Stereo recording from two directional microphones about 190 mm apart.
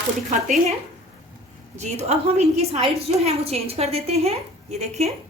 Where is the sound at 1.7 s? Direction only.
35° right (ahead or behind).